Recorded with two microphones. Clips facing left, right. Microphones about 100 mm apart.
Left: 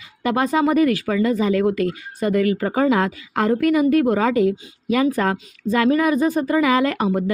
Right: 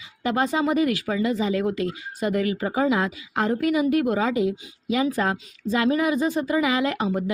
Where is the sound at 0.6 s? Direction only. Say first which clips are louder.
Left 5 dB; 50° left (ahead or behind).